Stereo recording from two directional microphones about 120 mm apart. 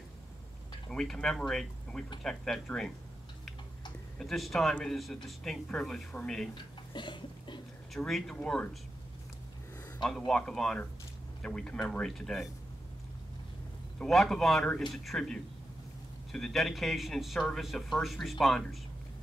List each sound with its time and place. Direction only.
0.8 s speech: 5° left (ahead or behind)
4.2 s speech: 5° left (ahead or behind)
6.5 s speech: 40° left (ahead or behind)
7.9 s speech: 5° left (ahead or behind)
10.0 s speech: 5° left (ahead or behind)
13.9 s speech: centre (ahead or behind)